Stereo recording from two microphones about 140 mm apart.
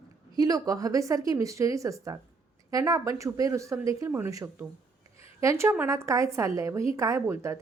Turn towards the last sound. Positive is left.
turn(degrees=-20)  # may be behind; listen again after turning